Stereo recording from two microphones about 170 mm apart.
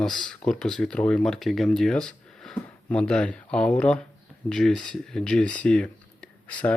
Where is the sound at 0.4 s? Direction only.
Centre (ahead or behind).